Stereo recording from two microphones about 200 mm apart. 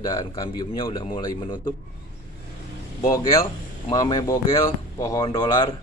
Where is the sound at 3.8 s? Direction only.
20° left (ahead or behind).